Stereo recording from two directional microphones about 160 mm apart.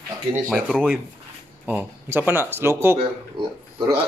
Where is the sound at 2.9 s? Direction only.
30° right (ahead or behind).